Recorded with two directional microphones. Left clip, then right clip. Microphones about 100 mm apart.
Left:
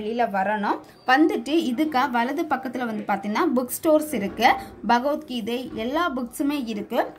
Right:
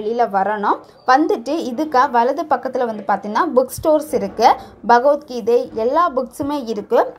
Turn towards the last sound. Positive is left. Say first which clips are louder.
# right 9 dB
turn(degrees=-30)  # may be behind; listen again after turning